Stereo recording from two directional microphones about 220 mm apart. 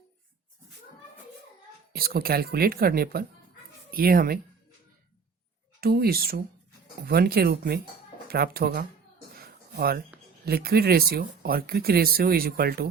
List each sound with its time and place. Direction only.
1.9 s speech: 45° right (ahead or behind)
5.8 s speech: 45° right (ahead or behind)
9.3 s a sound: 45° right (ahead or behind)
10.4 s speech: 45° right (ahead or behind)